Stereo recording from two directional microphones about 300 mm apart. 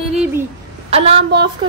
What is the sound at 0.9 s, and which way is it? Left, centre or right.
Speech, centre.